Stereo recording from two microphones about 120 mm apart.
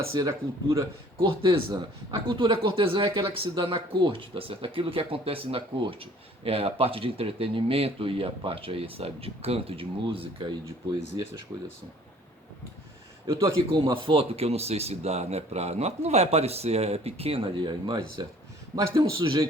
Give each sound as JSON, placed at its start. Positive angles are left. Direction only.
{"t": 0.0, "sound": "speech", "side_deg": -25}
{"t": 1.4, "sound": "speech", "side_deg": -45}
{"t": 13.3, "sound": "a man's voice", "side_deg": -30}
{"t": 13.9, "sound": "a man's voice", "side_deg": -50}